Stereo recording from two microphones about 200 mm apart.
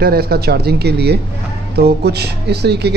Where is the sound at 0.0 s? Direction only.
50° right (ahead or behind).